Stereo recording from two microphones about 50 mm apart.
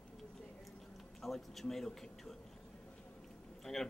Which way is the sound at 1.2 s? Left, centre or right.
Centre.